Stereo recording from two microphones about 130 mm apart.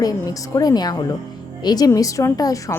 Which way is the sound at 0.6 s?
30° left (ahead or behind).